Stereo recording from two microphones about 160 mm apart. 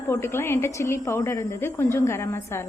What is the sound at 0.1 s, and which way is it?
A woman's voice, 15° left (ahead or behind).